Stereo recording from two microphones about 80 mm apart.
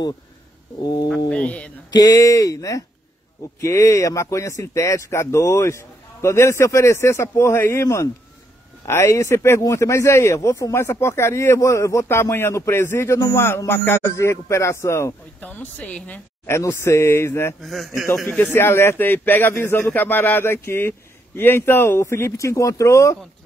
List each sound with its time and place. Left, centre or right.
1.3 s speech: centre
1.9 s speech: left
15.4 s a man's voice: left
16.4 s speech: left
17.6 s a man's voice: centre
18.5 s a man's voice: left